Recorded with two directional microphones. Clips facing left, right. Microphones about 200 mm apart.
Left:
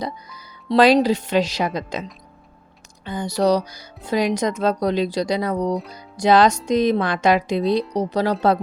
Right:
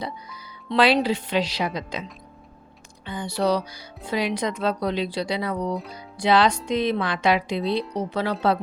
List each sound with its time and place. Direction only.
0.0 s speech: 40° left (ahead or behind)
3.1 s speech: 40° left (ahead or behind)
5.7 s music: centre (ahead or behind)
6.1 s speech: 45° left (ahead or behind)